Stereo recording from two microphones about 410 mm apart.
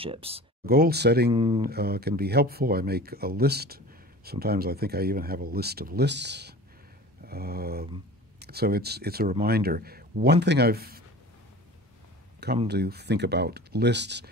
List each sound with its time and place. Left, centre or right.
0.0 s speech: centre
1.3 s speech: centre
1.7 s speech: right
12.4 s speech: right